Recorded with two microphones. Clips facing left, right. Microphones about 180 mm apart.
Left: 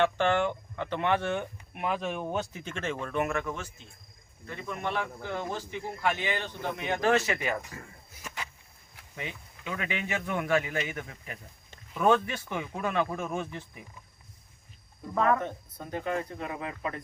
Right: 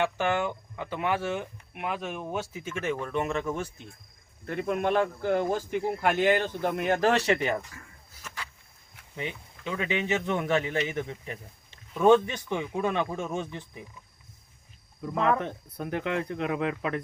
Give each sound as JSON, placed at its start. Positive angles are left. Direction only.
{"t": 0.0, "sound": "speech", "side_deg": -10}
{"t": 4.4, "sound": "speech", "side_deg": -60}
{"t": 8.1, "sound": "a sound", "side_deg": 15}
{"t": 9.7, "sound": "a man's voice", "side_deg": -25}
{"t": 15.1, "sound": "a man's voice", "side_deg": -20}
{"t": 15.4, "sound": "speech", "side_deg": -90}